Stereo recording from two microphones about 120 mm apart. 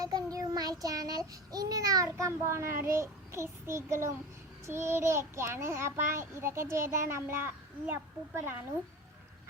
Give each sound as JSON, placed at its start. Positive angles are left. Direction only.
{"t": 0.0, "sound": "child singing", "side_deg": -30}